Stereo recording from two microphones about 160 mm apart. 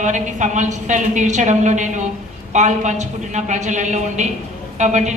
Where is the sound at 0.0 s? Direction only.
50° right (ahead or behind).